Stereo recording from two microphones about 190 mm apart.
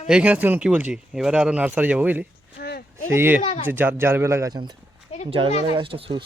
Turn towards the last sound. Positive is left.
turn(degrees=-30)  # may be behind; listen again after turning